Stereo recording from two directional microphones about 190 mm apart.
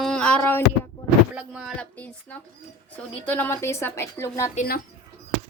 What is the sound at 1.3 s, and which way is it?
Speech, 5° right (ahead or behind).